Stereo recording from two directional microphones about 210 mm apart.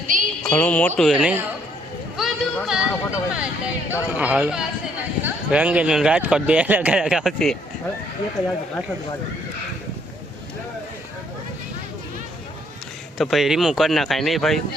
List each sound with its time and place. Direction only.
0.1 s music: 40° right (ahead or behind)
0.5 s speech: 5° left (ahead or behind)
2.1 s a sound: centre (ahead or behind)
4.2 s speech: 5° right (ahead or behind)
13.1 s speech: centre (ahead or behind)